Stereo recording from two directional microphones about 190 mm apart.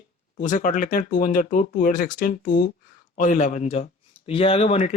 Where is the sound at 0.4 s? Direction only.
40° left (ahead or behind).